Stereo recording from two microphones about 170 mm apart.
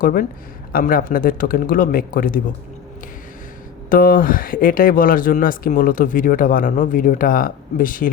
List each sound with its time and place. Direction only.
0.0 s a man's voice: 55° left (ahead or behind)
3.8 s speech: 55° left (ahead or behind)